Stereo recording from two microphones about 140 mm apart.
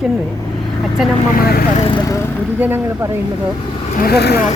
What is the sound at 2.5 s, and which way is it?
Speech, 15° right (ahead or behind).